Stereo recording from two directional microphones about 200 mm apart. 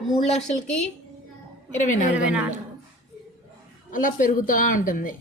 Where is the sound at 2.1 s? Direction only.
5° right (ahead or behind).